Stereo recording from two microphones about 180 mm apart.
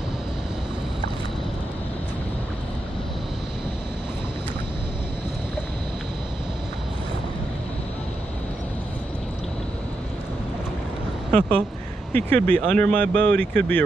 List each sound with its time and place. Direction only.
11.3 s speech: 5° left (ahead or behind)